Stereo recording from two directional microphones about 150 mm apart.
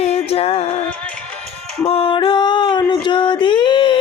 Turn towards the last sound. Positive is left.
turn(degrees=30)  # may be behind; listen again after turning